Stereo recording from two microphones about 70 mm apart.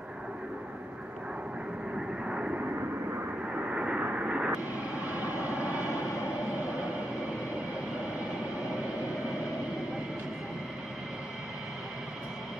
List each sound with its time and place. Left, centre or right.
2.0 s vehicle: centre
5.9 s vehicle: left